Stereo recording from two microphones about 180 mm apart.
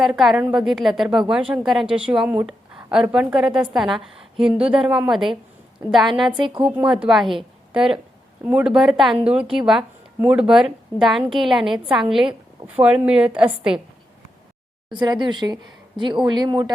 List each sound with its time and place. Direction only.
0.0 s a woman's voice: centre (ahead or behind)
14.9 s speech: 25° right (ahead or behind)